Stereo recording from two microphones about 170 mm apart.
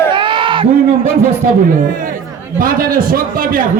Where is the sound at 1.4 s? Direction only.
50° right (ahead or behind).